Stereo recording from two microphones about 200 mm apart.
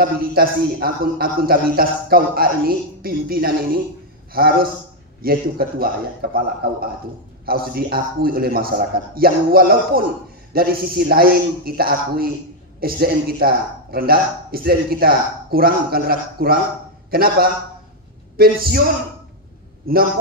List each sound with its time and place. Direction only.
0.0 s a man's voice: 50° right (ahead or behind)